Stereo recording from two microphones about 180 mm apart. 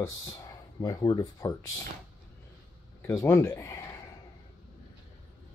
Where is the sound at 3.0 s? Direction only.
15° left (ahead or behind).